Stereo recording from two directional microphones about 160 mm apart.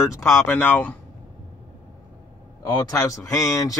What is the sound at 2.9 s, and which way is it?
Speech, 20° left (ahead or behind).